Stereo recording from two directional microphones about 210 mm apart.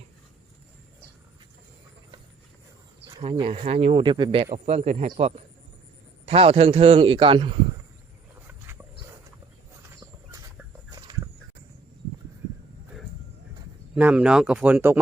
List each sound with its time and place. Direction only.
3.1 s speech: 25° right (ahead or behind)
8.4 s dog: 10° right (ahead or behind)
13.9 s speech: 5° right (ahead or behind)